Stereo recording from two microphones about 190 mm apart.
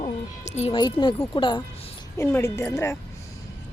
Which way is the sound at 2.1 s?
15° left (ahead or behind).